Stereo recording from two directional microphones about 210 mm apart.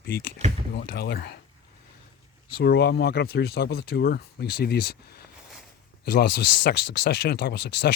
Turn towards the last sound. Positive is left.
turn(degrees=50)  # may be behind; listen again after turning